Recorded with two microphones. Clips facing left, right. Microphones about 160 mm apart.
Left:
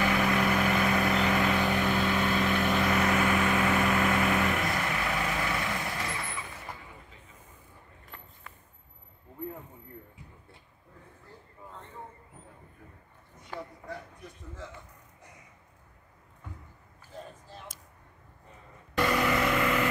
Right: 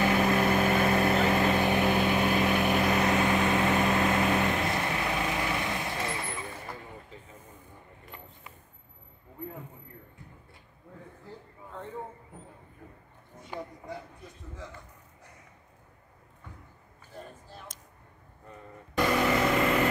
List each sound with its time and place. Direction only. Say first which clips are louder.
0.0 s vehicle: right 2 dB; 25° right (ahead or behind)
13.5 s a sound: right 1 dB; 15° right (ahead or behind)
18.9 s vehicle: right 1 dB; 20° right (ahead or behind)